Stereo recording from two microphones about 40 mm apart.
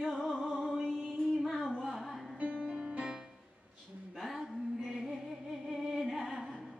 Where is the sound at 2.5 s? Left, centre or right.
Centre.